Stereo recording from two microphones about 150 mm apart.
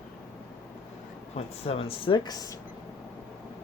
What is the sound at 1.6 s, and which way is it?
Speech, 40° left (ahead or behind).